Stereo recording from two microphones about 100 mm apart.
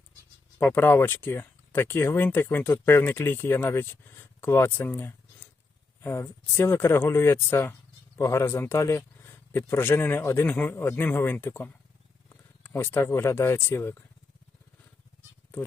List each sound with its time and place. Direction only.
0.6 s speech: 20° left (ahead or behind)